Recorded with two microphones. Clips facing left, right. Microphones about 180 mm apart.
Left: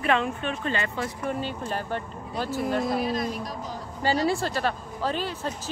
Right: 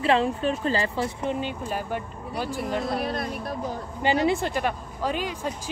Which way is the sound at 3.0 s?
60° right (ahead or behind).